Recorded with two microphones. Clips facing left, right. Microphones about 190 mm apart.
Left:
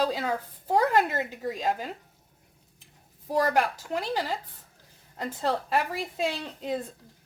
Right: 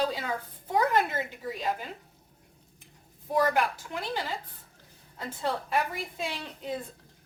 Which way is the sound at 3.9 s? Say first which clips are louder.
Left 5 dB; 40° left (ahead or behind).